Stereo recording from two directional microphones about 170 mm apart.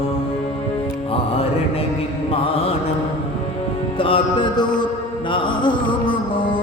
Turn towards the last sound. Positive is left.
turn(degrees=30)  # may be behind; listen again after turning